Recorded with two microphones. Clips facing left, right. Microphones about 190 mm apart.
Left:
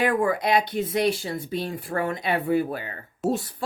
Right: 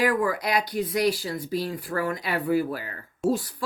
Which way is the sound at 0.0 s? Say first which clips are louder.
Left 1 dB; 25° left (ahead or behind).